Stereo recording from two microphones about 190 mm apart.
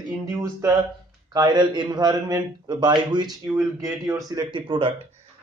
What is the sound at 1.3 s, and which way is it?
A man's voice, 20° right (ahead or behind).